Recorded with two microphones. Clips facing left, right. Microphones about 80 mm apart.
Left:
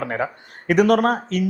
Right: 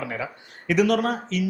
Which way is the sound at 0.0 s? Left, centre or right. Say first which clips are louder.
Left 6 dB; left.